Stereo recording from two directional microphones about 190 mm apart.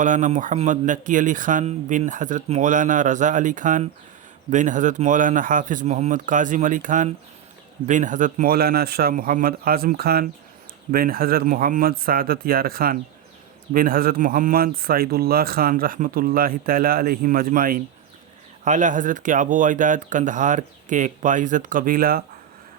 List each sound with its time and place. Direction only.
0.0 s a man's voice: 40° right (ahead or behind)